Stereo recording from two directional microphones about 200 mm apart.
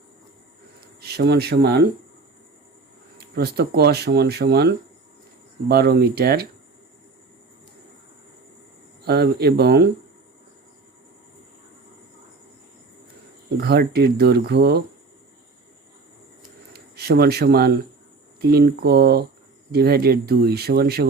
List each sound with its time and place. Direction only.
0.8 s speech: 55° right (ahead or behind)
3.3 s speech: 55° right (ahead or behind)
9.0 s speech: 55° right (ahead or behind)
13.6 s speech: 50° right (ahead or behind)
16.7 s a sound: 55° right (ahead or behind)
18.3 s speech: 50° right (ahead or behind)